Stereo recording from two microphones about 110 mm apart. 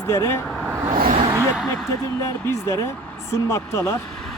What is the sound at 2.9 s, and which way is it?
Speech, 15° left (ahead or behind).